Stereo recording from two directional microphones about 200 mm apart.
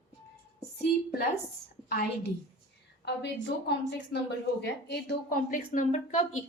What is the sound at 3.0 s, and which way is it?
A woman's voice, 60° left (ahead or behind).